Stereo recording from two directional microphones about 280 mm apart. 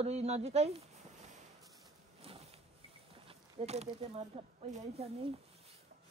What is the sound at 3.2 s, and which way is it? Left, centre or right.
Speech, right.